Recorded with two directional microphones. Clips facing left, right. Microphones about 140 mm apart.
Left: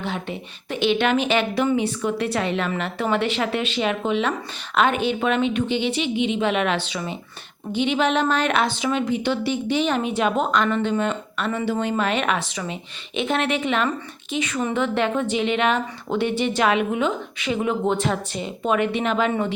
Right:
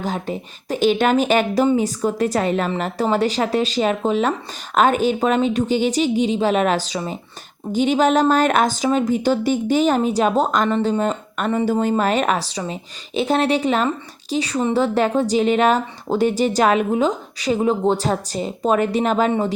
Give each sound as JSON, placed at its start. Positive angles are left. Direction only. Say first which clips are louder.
{"t": 0.0, "sound": "a woman's voice", "louder": "right 4 dB", "side_deg": -40}